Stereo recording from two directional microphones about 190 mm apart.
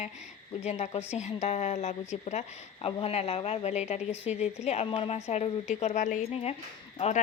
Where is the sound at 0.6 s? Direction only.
35° left (ahead or behind).